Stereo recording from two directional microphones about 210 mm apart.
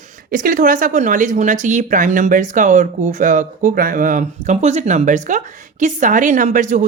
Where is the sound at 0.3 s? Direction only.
40° right (ahead or behind).